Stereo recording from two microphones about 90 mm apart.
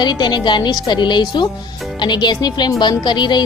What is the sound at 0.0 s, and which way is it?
A woman's voice, 55° left (ahead or behind).